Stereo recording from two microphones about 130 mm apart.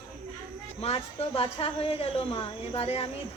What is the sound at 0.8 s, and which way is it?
A woman's voice, 50° left (ahead or behind).